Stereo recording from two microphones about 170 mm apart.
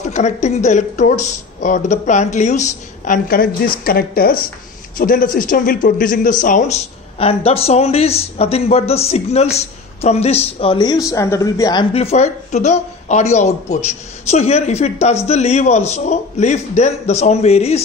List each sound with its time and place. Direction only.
0.0 s a man's voice: 45° left (ahead or behind); by 11.8 s 20° left (ahead or behind)
11.9 s speech: 35° left (ahead or behind)